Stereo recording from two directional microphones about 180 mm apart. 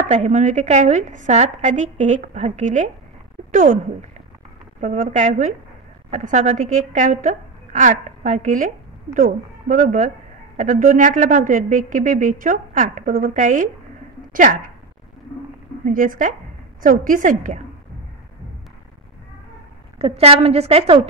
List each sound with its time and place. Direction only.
0.1 s a woman's voice: 40° right (ahead or behind)
15.8 s speech: 50° right (ahead or behind)
20.0 s a woman's voice: 35° right (ahead or behind)